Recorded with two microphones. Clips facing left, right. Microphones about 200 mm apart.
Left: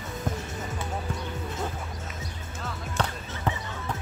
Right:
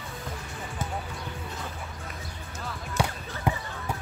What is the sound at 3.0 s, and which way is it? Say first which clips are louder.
Basketball bounce: right 1 dB; 10° right (ahead or behind).